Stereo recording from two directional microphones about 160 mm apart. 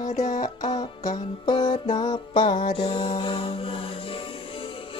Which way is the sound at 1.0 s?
25° left (ahead or behind).